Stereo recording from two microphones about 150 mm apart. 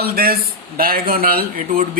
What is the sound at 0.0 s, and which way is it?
Speech, 85° right.